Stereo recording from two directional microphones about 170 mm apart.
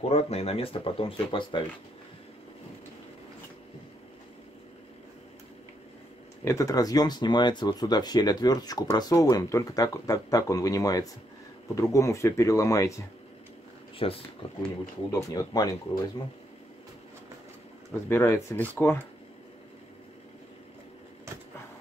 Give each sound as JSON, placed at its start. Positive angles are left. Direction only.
{"t": 0.1, "sound": "speech", "side_deg": 40}
{"t": 6.4, "sound": "speech", "side_deg": 20}
{"t": 13.9, "sound": "speech", "side_deg": 35}
{"t": 15.0, "sound": "speech", "side_deg": 20}
{"t": 18.0, "sound": "speech", "side_deg": 15}